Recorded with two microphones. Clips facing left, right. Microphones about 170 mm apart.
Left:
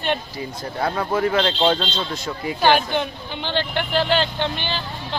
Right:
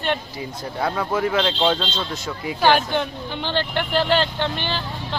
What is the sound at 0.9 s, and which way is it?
Speech, 15° left (ahead or behind).